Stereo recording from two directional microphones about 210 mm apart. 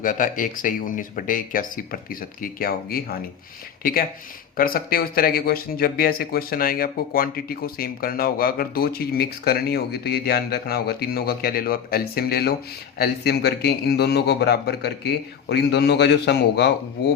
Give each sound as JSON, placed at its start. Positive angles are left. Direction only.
{"t": 0.0, "sound": "speech", "side_deg": 40}